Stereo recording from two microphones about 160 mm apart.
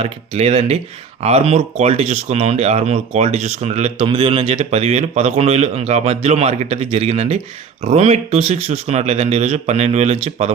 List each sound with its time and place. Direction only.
0.0 s speech: 40° right (ahead or behind)